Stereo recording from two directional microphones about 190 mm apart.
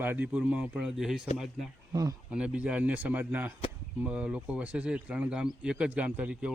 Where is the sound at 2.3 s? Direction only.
5° right (ahead or behind).